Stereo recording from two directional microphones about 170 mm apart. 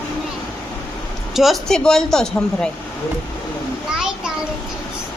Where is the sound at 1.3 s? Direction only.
Centre (ahead or behind).